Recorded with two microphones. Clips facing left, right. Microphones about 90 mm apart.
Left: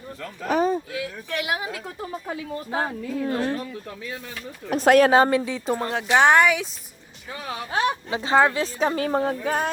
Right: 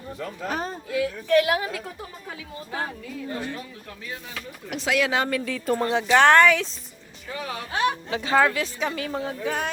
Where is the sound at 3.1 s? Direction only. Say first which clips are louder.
Left 9 dB; 85° left.